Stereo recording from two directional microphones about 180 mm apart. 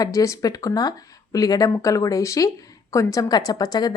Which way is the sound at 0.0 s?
20° left (ahead or behind).